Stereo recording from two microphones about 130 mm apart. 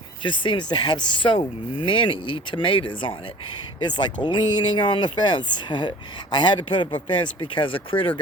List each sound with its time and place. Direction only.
0.2 s speech: 35° left (ahead or behind)